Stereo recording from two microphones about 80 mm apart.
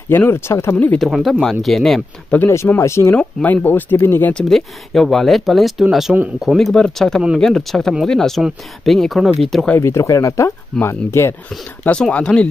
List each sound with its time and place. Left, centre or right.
0.1 s speech: left
0.9 s speech: centre
2.3 s speech: centre
2.8 s speech: left
4.3 s speech: centre
9.8 s speech: left
11.8 s speech: centre